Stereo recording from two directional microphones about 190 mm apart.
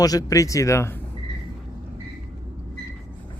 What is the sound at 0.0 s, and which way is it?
Speech, 20° left (ahead or behind).